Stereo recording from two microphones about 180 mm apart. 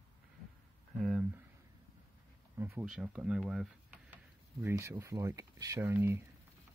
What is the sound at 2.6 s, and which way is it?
Speech, 10° right (ahead or behind).